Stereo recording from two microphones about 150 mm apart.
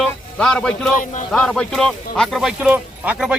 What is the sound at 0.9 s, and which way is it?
Speech, 60° left (ahead or behind).